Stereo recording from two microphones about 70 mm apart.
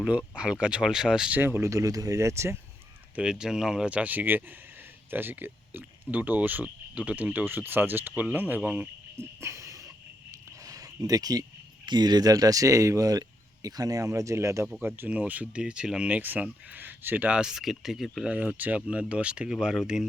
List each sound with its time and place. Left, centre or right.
0.0 s speech: centre
1.3 s speech: right
1.6 s speech: right
3.2 s speech: centre
3.8 s speech: centre
9.4 s dog: right
10.6 s a sound: right
11.9 s speech: right
14.1 s speech: right
14.8 s speech: right
15.1 s speech: centre
16.2 s speech: right
17.3 s speech: centre
18.3 s speech: right